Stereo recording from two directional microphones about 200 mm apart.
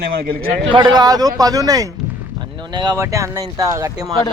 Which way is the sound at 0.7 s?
25° right (ahead or behind).